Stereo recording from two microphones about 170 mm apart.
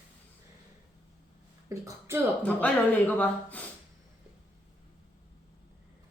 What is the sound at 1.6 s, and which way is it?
Speech, 15° right (ahead or behind).